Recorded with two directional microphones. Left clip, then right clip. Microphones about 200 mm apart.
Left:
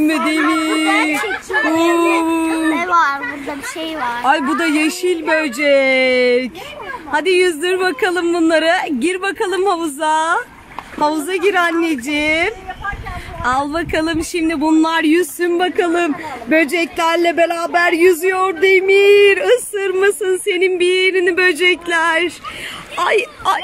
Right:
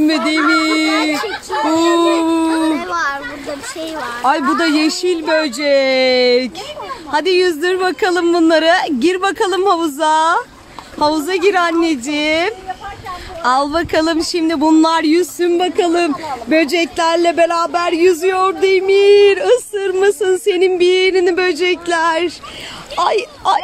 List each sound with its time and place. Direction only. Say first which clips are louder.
0.0 s speech: right 1 dB; centre (ahead or behind)
2.2 s dog: right 2 dB; 5° right (ahead or behind)
2.8 s children playing: left 4 dB; 20° left (ahead or behind)
4.2 s speech: right 2 dB; centre (ahead or behind)